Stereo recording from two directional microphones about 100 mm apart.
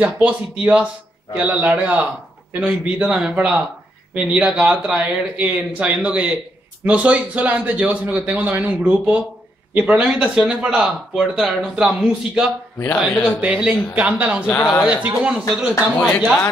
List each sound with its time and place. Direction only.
0.0 s a man's voice: 15° right (ahead or behind)
12.7 s speech: 25° left (ahead or behind)
13.4 s a man's voice: 10° right (ahead or behind)
14.5 s speech: 25° left (ahead or behind)
15.0 s a man's voice: 10° right (ahead or behind)